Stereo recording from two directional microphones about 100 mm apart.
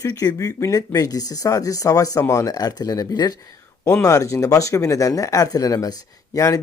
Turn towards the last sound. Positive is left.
turn(degrees=35)  # may be behind; listen again after turning